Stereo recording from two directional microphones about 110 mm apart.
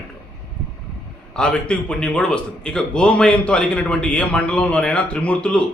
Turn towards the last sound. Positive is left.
turn(degrees=10)  # may be behind; listen again after turning